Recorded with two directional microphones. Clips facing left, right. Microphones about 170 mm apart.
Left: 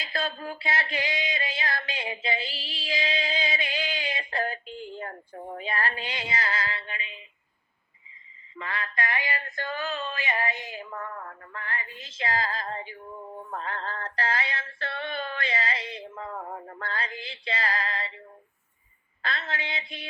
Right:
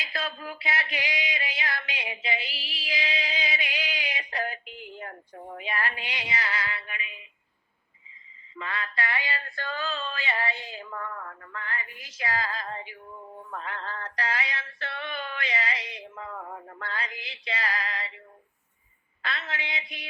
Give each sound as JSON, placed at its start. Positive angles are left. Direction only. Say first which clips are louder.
{"t": 0.0, "sound": "music", "louder": "left 3 dB", "side_deg": 30}
{"t": 1.8, "sound": "a sound", "louder": "left 3 dB", "side_deg": 30}
{"t": 6.5, "sound": "female singing", "louder": "left 2 dB", "side_deg": 30}
{"t": 8.5, "sound": "synthetic singing", "louder": "even", "side_deg": 30}
{"t": 9.6, "sound": "a sound", "louder": "left 1 dB", "side_deg": 20}
{"t": 11.0, "sound": "synthetic singing", "louder": "even", "side_deg": 30}
{"t": 12.4, "sound": "female singing", "louder": "left 2 dB", "side_deg": 40}
{"t": 13.5, "sound": "synthetic singing", "louder": "left 2 dB", "side_deg": 35}
{"t": 19.2, "sound": "a woman's voice", "louder": "left 2 dB", "side_deg": 35}